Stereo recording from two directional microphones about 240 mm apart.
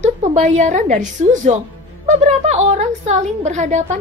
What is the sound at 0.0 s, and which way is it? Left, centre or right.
A woman's voice, right.